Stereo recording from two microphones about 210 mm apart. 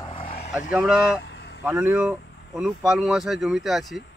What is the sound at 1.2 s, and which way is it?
Vehicle, 50° left (ahead or behind).